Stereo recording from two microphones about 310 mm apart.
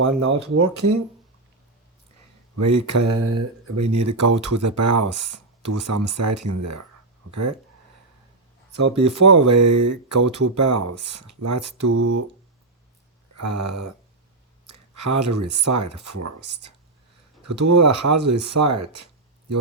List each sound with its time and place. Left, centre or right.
0.3 s speech: right
2.6 s speech: right
9.0 s speech: right
13.3 s speech: right
15.0 s speech: right
17.4 s speech: right